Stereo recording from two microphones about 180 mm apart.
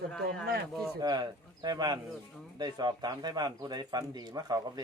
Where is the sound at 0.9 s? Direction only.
20° right (ahead or behind).